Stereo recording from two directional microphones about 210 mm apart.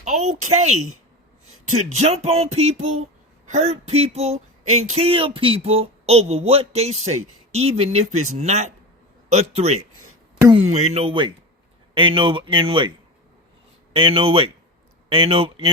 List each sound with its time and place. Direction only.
0.0 s speech: 35° right (ahead or behind)
1.5 s a sound: 90° right
1.9 s speech: 30° right (ahead or behind)
13.9 s speech: 25° right (ahead or behind)